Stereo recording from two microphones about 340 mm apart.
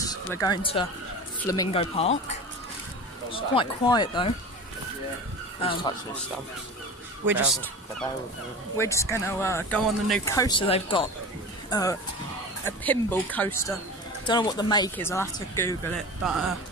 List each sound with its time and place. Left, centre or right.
0.3 s speech: centre
3.3 s speech: centre
5.6 s speech: centre
8.7 s speech: centre